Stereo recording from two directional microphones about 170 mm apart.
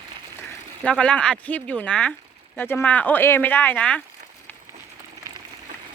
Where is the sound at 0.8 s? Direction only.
5° left (ahead or behind).